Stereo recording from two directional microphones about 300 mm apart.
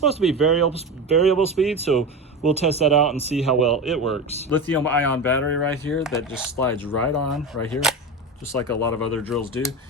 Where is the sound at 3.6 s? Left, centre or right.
Centre.